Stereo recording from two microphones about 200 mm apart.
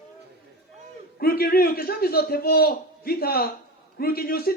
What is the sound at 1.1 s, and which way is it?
A man's voice, 50° left (ahead or behind).